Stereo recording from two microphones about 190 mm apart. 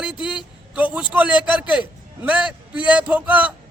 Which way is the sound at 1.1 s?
10° right (ahead or behind).